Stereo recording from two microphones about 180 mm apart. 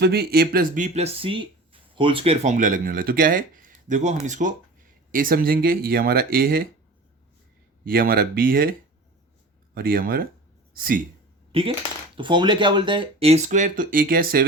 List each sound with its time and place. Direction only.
0.0 s speech: 60° right (ahead or behind)
0.9 s speech: 35° right (ahead or behind); by 6.7 s 55° right (ahead or behind)
7.9 s speech: 55° right (ahead or behind)
9.7 s speech: 55° right (ahead or behind)
11.5 s speech: 30° right (ahead or behind); by 14.4 s 55° right (ahead or behind)